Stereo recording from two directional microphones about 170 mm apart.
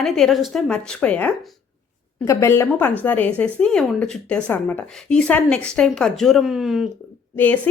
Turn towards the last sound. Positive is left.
turn(degrees=10)  # may be behind; listen again after turning